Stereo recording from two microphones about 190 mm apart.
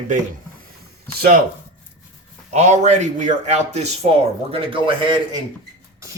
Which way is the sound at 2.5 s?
40° right (ahead or behind).